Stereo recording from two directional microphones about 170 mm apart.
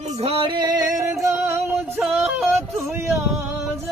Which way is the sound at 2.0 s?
Centre (ahead or behind).